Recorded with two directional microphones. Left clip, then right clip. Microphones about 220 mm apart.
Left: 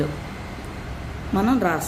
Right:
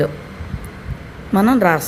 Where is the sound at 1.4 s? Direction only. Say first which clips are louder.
Right 7 dB; 35° right (ahead or behind).